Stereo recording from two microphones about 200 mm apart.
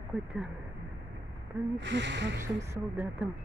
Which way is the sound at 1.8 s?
65° right (ahead or behind).